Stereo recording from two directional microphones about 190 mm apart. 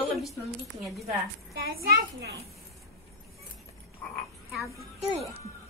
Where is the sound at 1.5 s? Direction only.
50° right (ahead or behind).